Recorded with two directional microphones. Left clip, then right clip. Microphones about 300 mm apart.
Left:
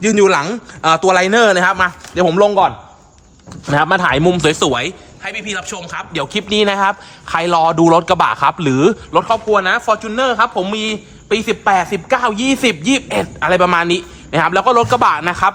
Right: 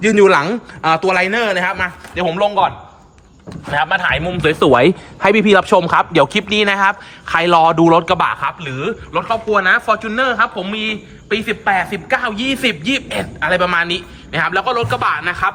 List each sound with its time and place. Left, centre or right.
0.0 s a man's voice: centre
3.7 s a man's voice: centre
4.7 s a man's voice: centre